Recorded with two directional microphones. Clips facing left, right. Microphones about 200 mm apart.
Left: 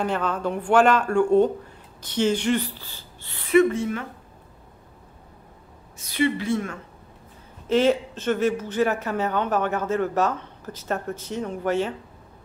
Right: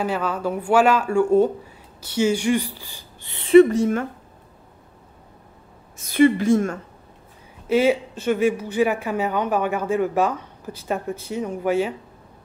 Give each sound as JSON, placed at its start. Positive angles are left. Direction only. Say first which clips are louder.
{"t": 0.0, "sound": "speech", "louder": "right 1 dB", "side_deg": -5}
{"t": 6.1, "sound": "a woman's voice", "louder": "right 7 dB", "side_deg": -50}
{"t": 7.6, "sound": "speech", "louder": "right 1 dB", "side_deg": -10}